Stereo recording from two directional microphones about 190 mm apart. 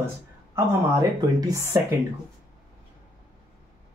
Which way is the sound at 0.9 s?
20° right (ahead or behind).